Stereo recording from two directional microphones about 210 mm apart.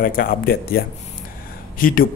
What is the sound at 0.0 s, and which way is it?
Speech, 45° left (ahead or behind).